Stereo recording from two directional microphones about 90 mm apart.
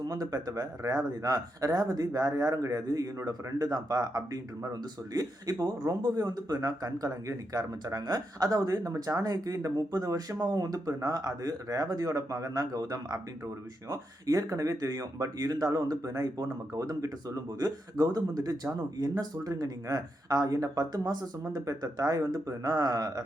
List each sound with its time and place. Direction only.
0.0 s speech: 40° right (ahead or behind)